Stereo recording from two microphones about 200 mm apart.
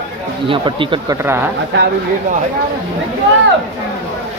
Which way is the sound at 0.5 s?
25° right (ahead or behind).